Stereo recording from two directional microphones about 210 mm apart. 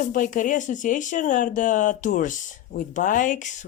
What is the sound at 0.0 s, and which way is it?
Speech, 35° left (ahead or behind).